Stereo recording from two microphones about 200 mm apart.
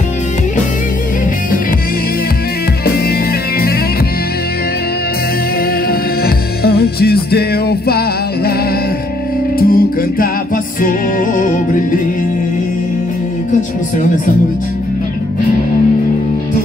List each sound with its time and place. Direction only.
2.8 s music: 50° left (ahead or behind)
5.9 s music: 50° left (ahead or behind)
9.6 s music: 45° left (ahead or behind)